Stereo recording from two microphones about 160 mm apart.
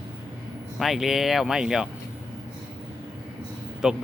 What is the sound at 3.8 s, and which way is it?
Speech, 5° right (ahead or behind).